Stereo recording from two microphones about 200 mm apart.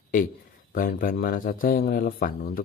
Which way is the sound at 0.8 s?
45° left (ahead or behind).